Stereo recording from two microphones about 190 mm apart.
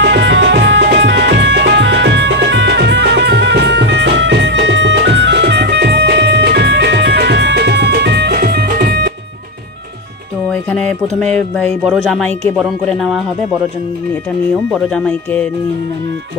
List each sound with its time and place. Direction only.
0.0 s music: 65° right (ahead or behind)
10.5 s speech: 5° left (ahead or behind)
14.5 s speech: 5° left (ahead or behind)